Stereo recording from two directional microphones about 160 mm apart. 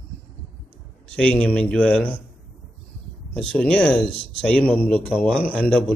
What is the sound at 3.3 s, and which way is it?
A man's voice, 5° left (ahead or behind).